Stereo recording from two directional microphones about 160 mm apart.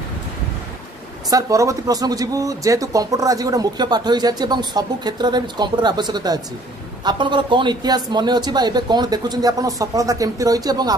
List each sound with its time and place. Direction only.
1.3 s speech: 20° right (ahead or behind)